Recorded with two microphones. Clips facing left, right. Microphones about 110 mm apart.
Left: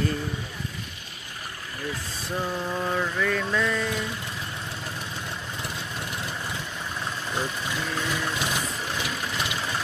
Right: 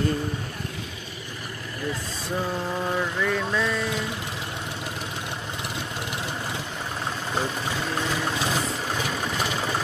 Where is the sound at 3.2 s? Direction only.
15° right (ahead or behind).